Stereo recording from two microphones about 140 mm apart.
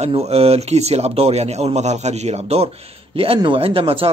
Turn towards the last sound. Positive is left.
turn(degrees=-40)  # may be behind; listen again after turning